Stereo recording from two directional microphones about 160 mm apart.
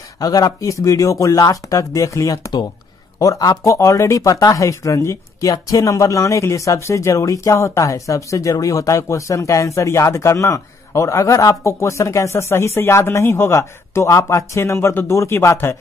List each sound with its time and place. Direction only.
0.2 s speech: 20° left (ahead or behind)